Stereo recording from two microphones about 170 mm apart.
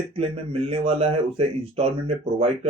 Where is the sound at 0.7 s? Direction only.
35° right (ahead or behind).